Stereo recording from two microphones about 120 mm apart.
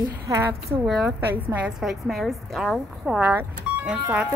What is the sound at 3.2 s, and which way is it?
Speech, 10° right (ahead or behind).